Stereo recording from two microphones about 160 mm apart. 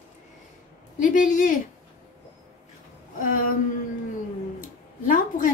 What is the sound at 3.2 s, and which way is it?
Speech, 60° left (ahead or behind).